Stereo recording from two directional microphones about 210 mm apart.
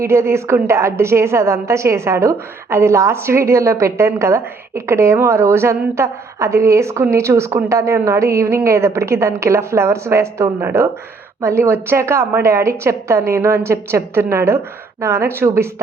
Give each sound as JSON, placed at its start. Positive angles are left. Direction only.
{"t": 0.0, "sound": "a woman's voice", "side_deg": -10}